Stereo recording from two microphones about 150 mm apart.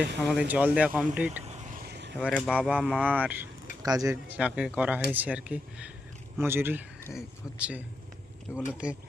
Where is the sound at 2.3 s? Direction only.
Centre (ahead or behind).